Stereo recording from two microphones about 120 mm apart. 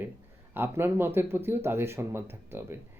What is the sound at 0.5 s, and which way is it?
Speech, 20° right (ahead or behind).